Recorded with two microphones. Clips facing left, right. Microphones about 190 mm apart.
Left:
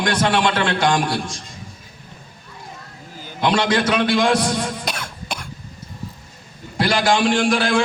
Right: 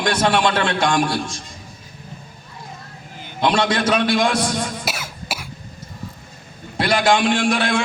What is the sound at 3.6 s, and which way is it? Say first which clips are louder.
Speech: left 1 dB; 25° right (ahead or behind).